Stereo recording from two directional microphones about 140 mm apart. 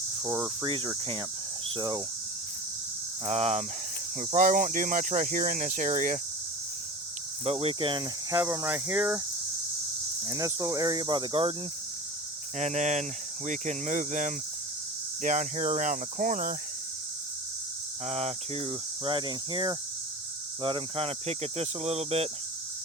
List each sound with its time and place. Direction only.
0.4 s speech: 35° right (ahead or behind)
3.2 s speech: 50° right (ahead or behind)
4.2 s speech: 65° right (ahead or behind)
7.4 s speech: 45° right (ahead or behind)
8.4 s speech: 20° right (ahead or behind)
10.2 s speech: 25° right (ahead or behind)
12.5 s speech: 55° right (ahead or behind); by 16.6 s 80° right
18.0 s speech: 50° right (ahead or behind)